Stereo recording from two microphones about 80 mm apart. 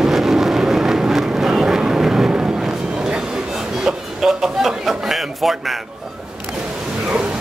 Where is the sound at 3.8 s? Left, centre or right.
Centre.